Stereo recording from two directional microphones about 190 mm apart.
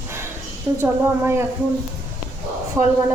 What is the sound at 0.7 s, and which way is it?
Speech, 10° right (ahead or behind).